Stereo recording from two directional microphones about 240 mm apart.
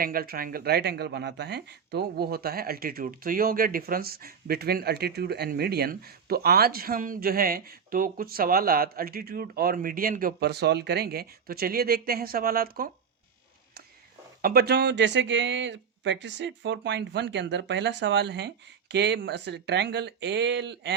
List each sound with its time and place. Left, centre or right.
0.0 s speech: right
14.4 s speech: right